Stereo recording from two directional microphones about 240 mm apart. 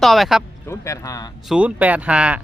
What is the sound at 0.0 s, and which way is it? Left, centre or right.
Speech, centre.